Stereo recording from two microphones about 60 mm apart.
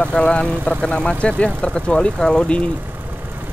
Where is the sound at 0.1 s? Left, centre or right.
Centre.